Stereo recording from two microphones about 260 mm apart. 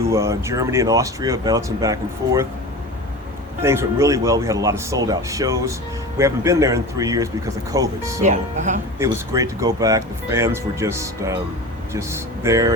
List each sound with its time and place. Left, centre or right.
0.1 s speech: centre
3.6 s speech: centre
8.2 s speech: right
9.0 s speech: centre